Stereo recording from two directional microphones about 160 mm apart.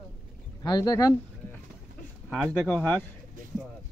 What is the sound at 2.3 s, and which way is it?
Speech, centre (ahead or behind).